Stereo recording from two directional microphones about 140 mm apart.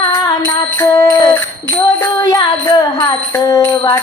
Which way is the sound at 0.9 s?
30° left (ahead or behind).